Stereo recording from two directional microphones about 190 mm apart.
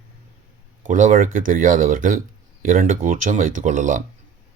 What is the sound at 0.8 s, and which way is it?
Speech, 40° right (ahead or behind).